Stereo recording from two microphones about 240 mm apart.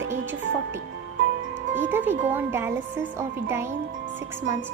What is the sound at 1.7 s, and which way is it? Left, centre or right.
Speech, centre.